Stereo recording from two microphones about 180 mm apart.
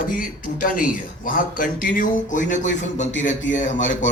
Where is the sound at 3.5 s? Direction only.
90° left.